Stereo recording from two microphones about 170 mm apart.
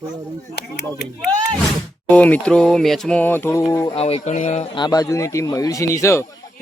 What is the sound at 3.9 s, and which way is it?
Speech, 35° left (ahead or behind).